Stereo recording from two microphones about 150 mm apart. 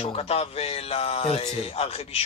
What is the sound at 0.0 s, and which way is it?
Speech, 40° left (ahead or behind).